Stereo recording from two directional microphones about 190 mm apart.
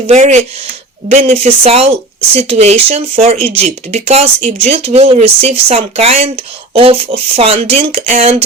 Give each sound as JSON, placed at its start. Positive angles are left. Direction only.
{"t": 0.1, "sound": "speech", "side_deg": -40}